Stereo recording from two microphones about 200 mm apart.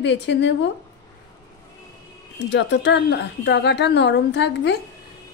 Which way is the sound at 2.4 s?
60° left (ahead or behind).